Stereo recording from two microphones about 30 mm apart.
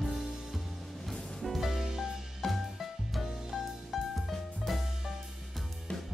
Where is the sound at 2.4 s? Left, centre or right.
Centre.